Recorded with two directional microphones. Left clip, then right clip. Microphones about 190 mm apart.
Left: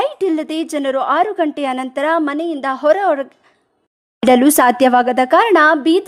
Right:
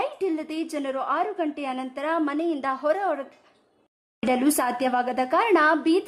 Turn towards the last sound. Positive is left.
turn(degrees=35)  # may be behind; listen again after turning